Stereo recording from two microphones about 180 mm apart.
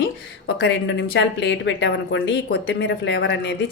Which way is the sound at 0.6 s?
80° left.